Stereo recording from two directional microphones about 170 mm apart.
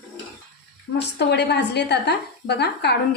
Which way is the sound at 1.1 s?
80° left.